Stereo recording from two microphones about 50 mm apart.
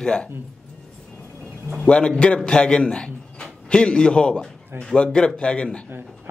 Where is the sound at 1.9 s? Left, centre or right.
Left.